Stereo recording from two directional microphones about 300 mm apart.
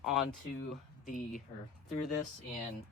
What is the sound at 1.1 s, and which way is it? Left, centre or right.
Speech, left.